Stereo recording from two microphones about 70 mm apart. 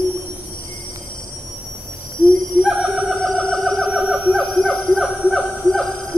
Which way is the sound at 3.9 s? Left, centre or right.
Centre.